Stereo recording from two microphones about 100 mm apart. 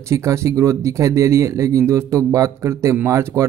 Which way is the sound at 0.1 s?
30° right (ahead or behind).